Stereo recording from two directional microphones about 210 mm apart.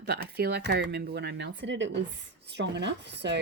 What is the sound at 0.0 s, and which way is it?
Speech, 50° right (ahead or behind).